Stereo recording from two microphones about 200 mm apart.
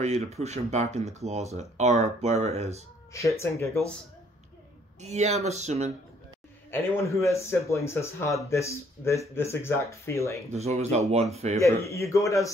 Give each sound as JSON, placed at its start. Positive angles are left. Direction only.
{"t": 0.0, "sound": "speech", "side_deg": -35}
{"t": 3.1, "sound": "speech", "side_deg": 15}
{"t": 5.0, "sound": "speech", "side_deg": -35}
{"t": 6.7, "sound": "speech", "side_deg": 10}
{"t": 10.5, "sound": "speech", "side_deg": -30}
{"t": 11.6, "sound": "speech", "side_deg": 15}